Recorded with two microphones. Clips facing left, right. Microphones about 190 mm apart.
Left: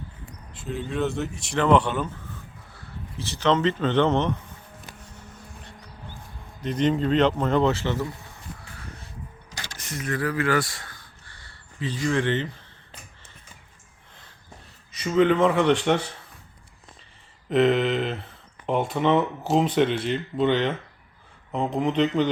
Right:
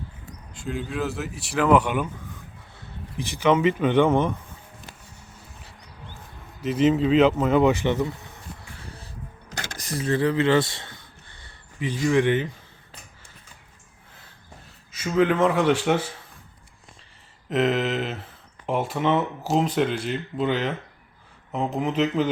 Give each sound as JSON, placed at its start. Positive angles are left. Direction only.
{"t": 0.6, "sound": "speech", "side_deg": 0}
{"t": 5.0, "sound": "a sound", "side_deg": -10}
{"t": 6.6, "sound": "speech", "side_deg": -5}
{"t": 8.9, "sound": "music", "side_deg": -35}
{"t": 9.7, "sound": "a sound", "side_deg": -35}
{"t": 14.9, "sound": "speech", "side_deg": 0}
{"t": 17.5, "sound": "speech", "side_deg": 0}